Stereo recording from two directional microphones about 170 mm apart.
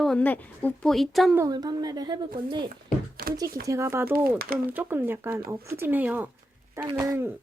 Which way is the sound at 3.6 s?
15° right (ahead or behind).